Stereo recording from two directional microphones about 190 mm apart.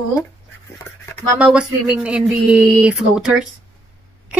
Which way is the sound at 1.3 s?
5° right (ahead or behind).